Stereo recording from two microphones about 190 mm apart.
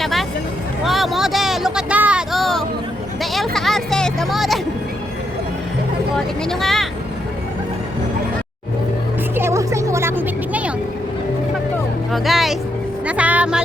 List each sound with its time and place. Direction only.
0.0 s vehicle: centre (ahead or behind)
0.9 s a sound: centre (ahead or behind)
3.3 s music: centre (ahead or behind)
6.1 s speech: centre (ahead or behind)
9.3 s music: 15° right (ahead or behind)
12.1 s music: centre (ahead or behind)